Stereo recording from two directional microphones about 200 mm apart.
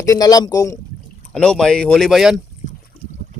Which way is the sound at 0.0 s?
15° left (ahead or behind).